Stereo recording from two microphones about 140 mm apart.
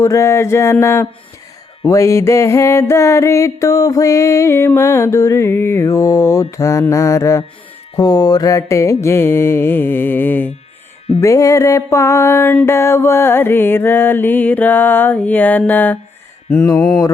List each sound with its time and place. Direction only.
0.0 s music: 20° left (ahead or behind)